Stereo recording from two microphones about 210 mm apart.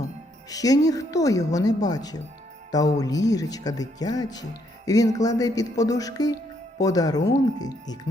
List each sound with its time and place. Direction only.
0.5 s speech: 15° left (ahead or behind)